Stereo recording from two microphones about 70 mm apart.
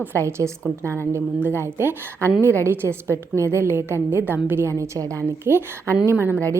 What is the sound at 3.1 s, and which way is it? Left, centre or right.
A woman's voice, right.